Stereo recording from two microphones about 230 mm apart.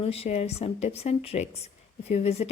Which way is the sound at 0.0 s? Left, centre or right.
Left.